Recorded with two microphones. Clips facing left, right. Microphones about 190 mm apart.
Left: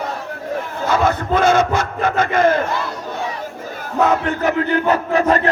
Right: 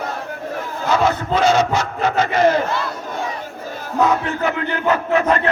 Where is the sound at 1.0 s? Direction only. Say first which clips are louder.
Left 1 dB; 50° left (ahead or behind).